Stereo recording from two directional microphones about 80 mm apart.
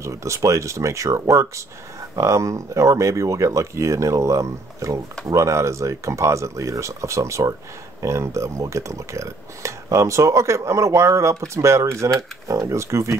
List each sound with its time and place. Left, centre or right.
0.0 s speech: right